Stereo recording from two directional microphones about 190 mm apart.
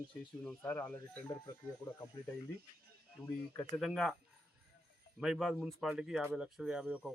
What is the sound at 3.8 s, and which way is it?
Speech, centre (ahead or behind).